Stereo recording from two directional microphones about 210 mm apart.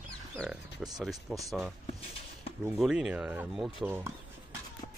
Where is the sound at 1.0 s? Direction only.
Centre (ahead or behind).